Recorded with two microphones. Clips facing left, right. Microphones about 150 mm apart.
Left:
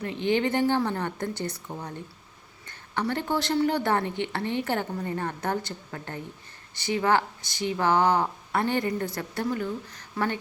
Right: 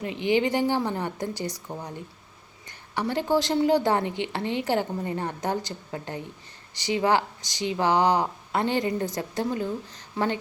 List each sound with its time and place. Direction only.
0.0 s a woman's voice: 15° right (ahead or behind)